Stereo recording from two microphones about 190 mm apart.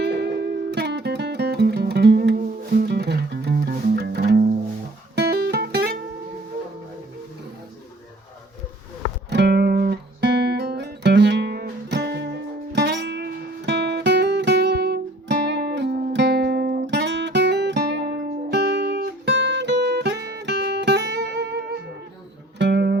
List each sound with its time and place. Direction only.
0.0 s music: 60° right (ahead or behind)
9.3 s music: 60° right (ahead or behind)